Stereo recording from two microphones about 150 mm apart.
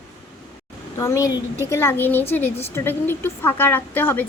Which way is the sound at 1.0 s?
20° left (ahead or behind).